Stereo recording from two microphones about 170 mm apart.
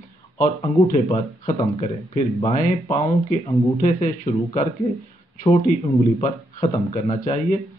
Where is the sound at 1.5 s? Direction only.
30° left (ahead or behind).